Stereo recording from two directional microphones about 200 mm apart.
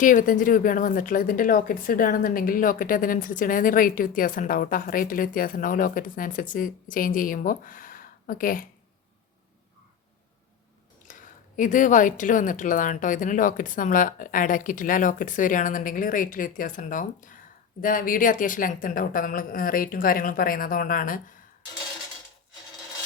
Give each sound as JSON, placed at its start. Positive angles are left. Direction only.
{"t": 0.0, "sound": "speech", "side_deg": 40}
{"t": 11.1, "sound": "speech", "side_deg": 40}